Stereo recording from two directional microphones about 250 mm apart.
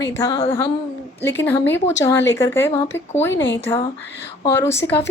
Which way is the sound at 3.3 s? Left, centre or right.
Left.